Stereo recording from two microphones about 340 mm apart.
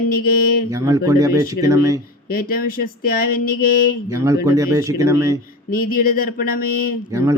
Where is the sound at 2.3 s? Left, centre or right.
Left.